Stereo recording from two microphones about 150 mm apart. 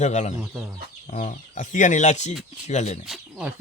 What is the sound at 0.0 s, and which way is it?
Speech, 50° left (ahead or behind).